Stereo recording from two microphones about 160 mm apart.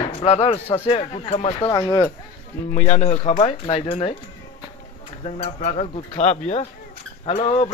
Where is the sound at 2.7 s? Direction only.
45° left (ahead or behind).